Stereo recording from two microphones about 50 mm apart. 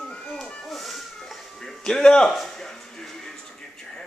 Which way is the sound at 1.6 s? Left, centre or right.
Centre.